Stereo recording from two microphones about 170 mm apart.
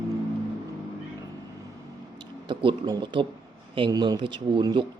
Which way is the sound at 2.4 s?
25° right (ahead or behind).